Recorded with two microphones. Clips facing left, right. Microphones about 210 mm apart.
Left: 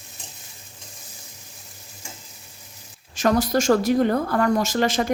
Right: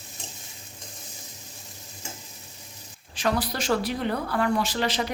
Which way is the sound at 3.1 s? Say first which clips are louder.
Left 7 dB; 45° left (ahead or behind).